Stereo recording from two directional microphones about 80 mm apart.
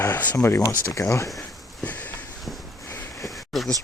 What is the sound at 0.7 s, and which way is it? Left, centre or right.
Speech, left.